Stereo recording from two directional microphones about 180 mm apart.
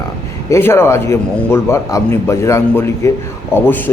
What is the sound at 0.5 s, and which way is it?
A man's voice, 15° left (ahead or behind).